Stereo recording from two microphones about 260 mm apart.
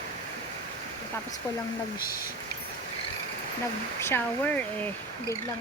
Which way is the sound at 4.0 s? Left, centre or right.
Centre.